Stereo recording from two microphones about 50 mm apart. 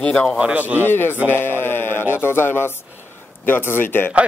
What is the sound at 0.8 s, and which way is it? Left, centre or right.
Speech, left.